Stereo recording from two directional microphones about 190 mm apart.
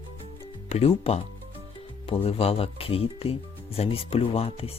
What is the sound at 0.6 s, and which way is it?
Speech, 30° left (ahead or behind).